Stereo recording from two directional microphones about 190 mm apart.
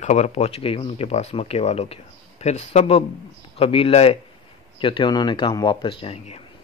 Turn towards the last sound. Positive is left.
turn(degrees=30)  # may be behind; listen again after turning